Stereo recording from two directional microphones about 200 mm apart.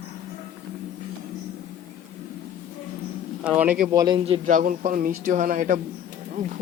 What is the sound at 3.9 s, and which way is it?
Speech, 20° right (ahead or behind).